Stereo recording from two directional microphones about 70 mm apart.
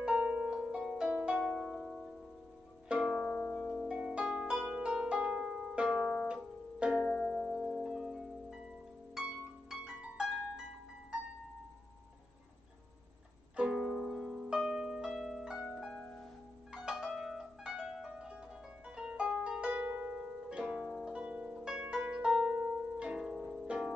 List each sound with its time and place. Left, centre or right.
0.0 s harp: centre
1.2 s music: centre
3.0 s harp: centre
3.9 s harp: centre
6.2 s music: centre
7.1 s music: centre
7.6 s harp: centre
13.6 s music: centre
15.9 s harp: centre
16.7 s zither: centre
18.9 s harp: centre
21.1 s zither: centre
21.5 s harp: centre
21.8 s music: centre